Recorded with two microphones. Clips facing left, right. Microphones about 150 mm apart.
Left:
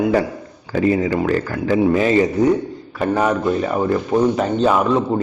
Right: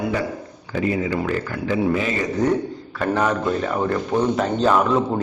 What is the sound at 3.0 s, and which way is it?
A man's voice, 10° left (ahead or behind).